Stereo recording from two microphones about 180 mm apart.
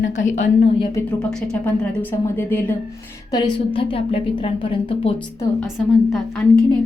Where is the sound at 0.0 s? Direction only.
40° left (ahead or behind).